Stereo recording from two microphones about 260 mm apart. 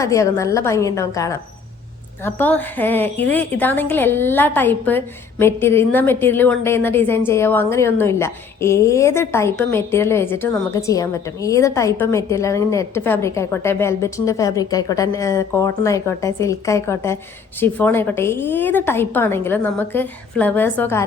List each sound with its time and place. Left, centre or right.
0.0 s a woman's voice: centre